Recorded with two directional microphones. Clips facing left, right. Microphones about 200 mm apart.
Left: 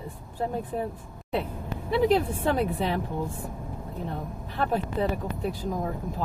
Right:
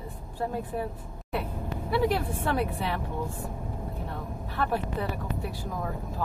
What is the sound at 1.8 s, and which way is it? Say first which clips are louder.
Speech: left 4 dB; 20° left (ahead or behind).